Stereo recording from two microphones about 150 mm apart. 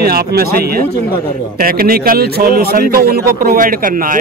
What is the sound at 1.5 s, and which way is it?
A man's voice, 75° right (ahead or behind).